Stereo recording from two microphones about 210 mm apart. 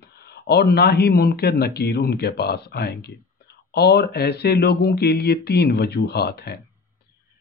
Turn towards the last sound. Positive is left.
turn(degrees=50)  # may be behind; listen again after turning